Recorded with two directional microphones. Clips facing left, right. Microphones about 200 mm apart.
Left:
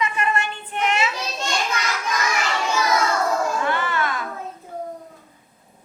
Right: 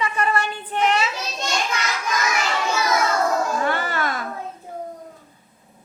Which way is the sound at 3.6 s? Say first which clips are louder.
Even; 40° right (ahead or behind).